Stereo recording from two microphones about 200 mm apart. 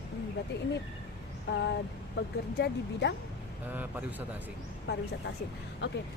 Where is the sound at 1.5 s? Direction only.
60° left (ahead or behind).